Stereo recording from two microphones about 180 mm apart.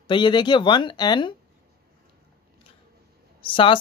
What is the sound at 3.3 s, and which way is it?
Speech, 30° left (ahead or behind).